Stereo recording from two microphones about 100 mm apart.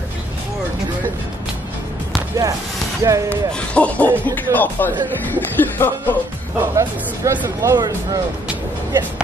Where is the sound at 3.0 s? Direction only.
35° right (ahead or behind).